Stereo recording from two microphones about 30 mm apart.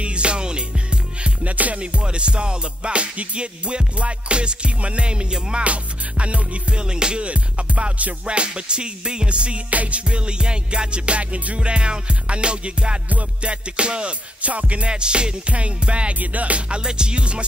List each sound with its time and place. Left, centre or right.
0.0 s music: right
1.4 s music: right
2.0 s music: right
5.6 s music: right
6.7 s music: right
7.2 s music: right
9.7 s music: right
10.0 s music: right
11.6 s music: right
14.4 s music: right
14.9 s music: right
16.2 s music: right
16.6 s music: right